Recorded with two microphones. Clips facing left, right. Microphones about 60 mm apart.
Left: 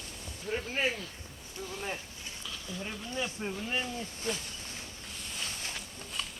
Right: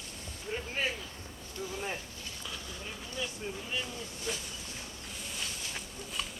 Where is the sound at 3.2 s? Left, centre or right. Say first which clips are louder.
Left 3 dB; left.